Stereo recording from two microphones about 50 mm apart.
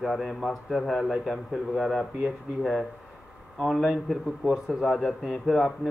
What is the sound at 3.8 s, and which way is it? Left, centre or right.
A man's voice, centre.